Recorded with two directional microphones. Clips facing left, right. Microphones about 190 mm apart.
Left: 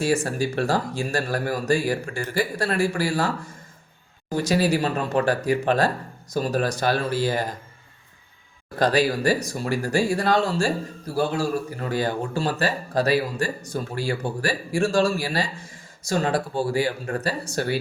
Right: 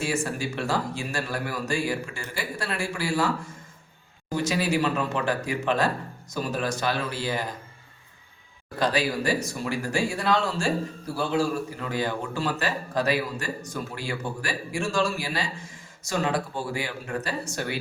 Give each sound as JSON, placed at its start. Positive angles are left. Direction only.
{"t": 0.0, "sound": "speech", "side_deg": 40}
{"t": 4.4, "sound": "speech", "side_deg": 40}
{"t": 8.8, "sound": "speech", "side_deg": 40}